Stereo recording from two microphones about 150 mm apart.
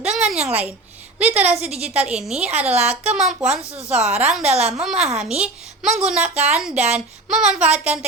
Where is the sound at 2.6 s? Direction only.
45° right (ahead or behind).